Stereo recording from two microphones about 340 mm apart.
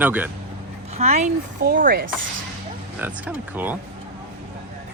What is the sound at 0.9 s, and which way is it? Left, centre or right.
Speech, centre.